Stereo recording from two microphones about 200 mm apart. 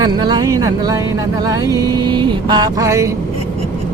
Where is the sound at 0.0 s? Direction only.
20° right (ahead or behind).